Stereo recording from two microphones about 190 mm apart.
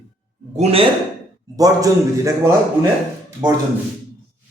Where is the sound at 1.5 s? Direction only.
20° right (ahead or behind).